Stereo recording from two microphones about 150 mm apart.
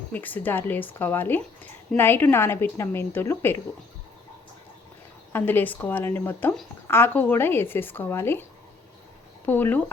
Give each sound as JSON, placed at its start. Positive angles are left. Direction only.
{"t": 0.1, "sound": "speech", "side_deg": 10}
{"t": 5.3, "sound": "speech", "side_deg": 15}
{"t": 9.5, "sound": "speech", "side_deg": 15}